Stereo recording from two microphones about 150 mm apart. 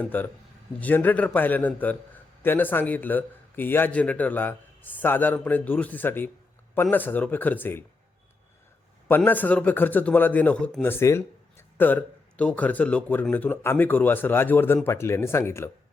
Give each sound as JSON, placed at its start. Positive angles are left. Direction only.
{"t": 0.0, "sound": "a man's voice", "side_deg": 10}
{"t": 9.0, "sound": "a man's voice", "side_deg": 15}
{"t": 10.9, "sound": "a man's voice", "side_deg": 15}